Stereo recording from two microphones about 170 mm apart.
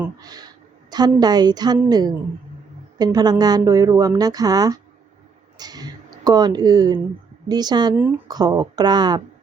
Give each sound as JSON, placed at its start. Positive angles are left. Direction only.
{"t": 0.2, "sound": "a woman's voice", "side_deg": -20}